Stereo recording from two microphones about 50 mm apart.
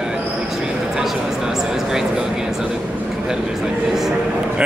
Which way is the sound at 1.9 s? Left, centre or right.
Centre.